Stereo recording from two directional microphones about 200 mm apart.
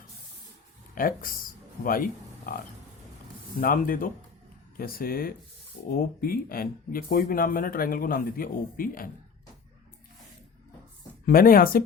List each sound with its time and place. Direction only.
0.9 s speech: 45° left (ahead or behind)
3.6 s speech: 45° left (ahead or behind)
11.3 s speech: 45° left (ahead or behind)